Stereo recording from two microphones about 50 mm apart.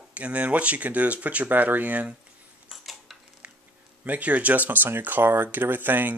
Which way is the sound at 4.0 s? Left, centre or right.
Right.